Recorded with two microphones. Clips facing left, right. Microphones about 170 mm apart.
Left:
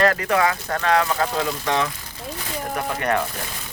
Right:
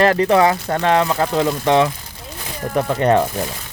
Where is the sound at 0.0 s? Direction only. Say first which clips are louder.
Right 6 dB; 30° right (ahead or behind).